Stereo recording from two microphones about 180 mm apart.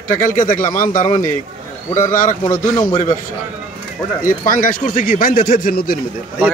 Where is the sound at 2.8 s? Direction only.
45° left (ahead or behind).